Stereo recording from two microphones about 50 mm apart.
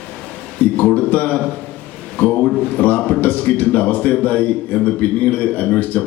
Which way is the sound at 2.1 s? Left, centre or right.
Left.